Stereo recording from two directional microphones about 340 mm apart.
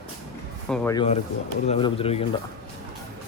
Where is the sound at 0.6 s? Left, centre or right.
Centre.